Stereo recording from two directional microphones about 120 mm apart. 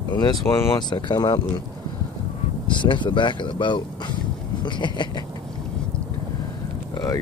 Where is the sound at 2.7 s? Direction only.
40° left (ahead or behind).